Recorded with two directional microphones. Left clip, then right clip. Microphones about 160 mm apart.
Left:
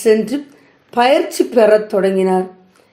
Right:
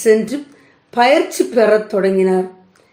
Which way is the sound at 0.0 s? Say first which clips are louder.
Even; 30° left (ahead or behind).